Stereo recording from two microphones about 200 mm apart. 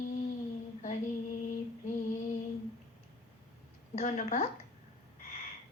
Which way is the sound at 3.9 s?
35° left (ahead or behind).